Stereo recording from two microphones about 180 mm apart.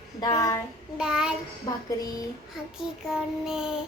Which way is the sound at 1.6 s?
20° left (ahead or behind).